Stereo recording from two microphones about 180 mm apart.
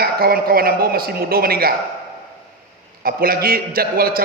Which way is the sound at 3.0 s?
55° right (ahead or behind).